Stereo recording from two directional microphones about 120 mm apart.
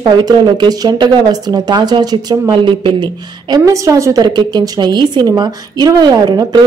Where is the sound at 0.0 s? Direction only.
40° right (ahead or behind).